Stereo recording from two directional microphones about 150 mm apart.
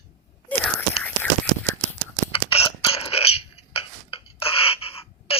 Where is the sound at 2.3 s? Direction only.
40° left (ahead or behind).